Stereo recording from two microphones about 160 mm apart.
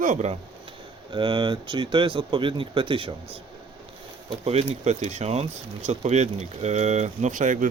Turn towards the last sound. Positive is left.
turn(degrees=-50)  # may be behind; listen again after turning